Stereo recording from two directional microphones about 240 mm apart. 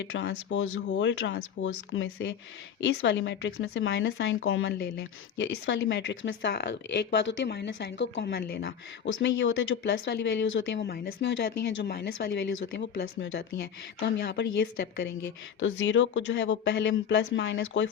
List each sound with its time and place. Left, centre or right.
0.0 s speech: left